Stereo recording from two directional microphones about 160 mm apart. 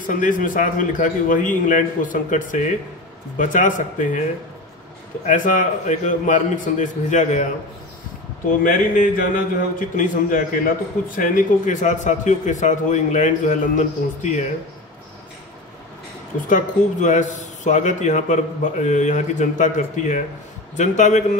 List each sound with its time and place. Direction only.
0.0 s a man's voice: 55° left (ahead or behind)
5.2 s a man's voice: 55° left (ahead or behind)
8.6 s a man's voice: 60° left (ahead or behind)
16.4 s a man's voice: 50° left (ahead or behind)